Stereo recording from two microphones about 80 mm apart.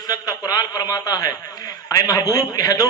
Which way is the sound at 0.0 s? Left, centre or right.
Left.